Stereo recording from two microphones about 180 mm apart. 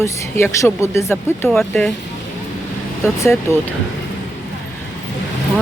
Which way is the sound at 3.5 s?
15° left (ahead or behind).